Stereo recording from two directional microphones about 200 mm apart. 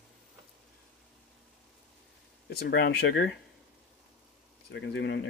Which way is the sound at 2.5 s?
55° left (ahead or behind).